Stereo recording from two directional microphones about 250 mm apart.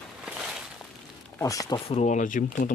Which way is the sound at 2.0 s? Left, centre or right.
Left.